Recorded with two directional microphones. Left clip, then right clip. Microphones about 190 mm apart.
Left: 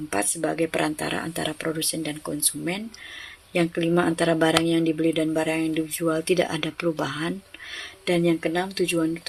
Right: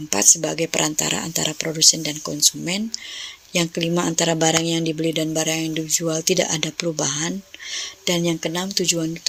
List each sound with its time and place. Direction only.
0.1 s speech: 40° right (ahead or behind)